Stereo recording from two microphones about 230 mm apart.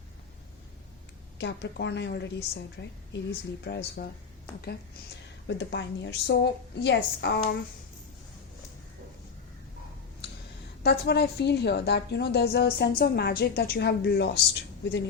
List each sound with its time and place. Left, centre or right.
1.4 s a woman's voice: left
5.5 s a woman's voice: left
10.8 s a woman's voice: left